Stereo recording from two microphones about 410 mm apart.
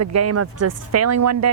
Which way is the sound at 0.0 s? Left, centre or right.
Right.